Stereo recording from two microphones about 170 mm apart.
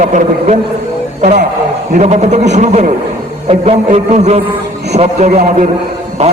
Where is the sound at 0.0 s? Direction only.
45° right (ahead or behind).